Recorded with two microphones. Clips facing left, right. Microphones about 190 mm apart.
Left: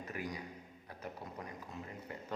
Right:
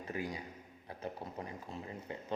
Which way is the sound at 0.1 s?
30° right (ahead or behind).